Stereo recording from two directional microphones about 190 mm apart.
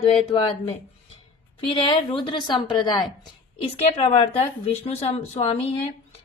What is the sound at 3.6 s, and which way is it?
Speech, 30° left (ahead or behind).